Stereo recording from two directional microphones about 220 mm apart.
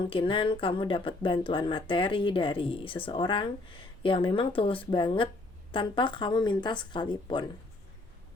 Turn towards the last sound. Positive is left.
turn(degrees=20)  # may be behind; listen again after turning